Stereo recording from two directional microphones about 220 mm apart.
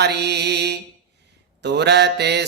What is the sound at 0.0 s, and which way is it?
Mantra, 50° right (ahead or behind).